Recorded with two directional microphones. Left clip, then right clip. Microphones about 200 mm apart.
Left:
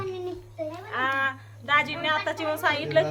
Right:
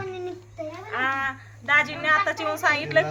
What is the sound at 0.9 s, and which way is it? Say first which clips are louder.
A woman's voice: even; 5° left (ahead or behind).